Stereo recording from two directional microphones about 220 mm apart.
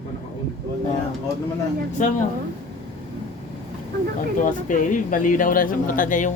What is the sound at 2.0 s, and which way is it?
Speech, 35° left (ahead or behind).